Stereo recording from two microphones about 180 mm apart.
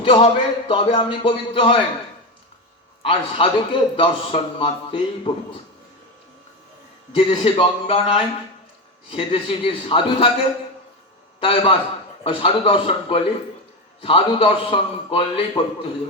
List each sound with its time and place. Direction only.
0.0 s speech: 30° left (ahead or behind)
3.0 s a man's voice: 30° left (ahead or behind)
7.1 s a man's voice: 30° left (ahead or behind)
11.3 s a man's voice: 30° left (ahead or behind)